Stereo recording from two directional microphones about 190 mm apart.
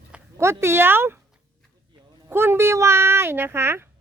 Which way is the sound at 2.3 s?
10° right (ahead or behind).